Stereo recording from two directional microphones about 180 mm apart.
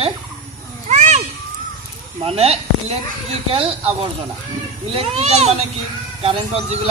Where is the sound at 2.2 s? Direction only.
35° right (ahead or behind).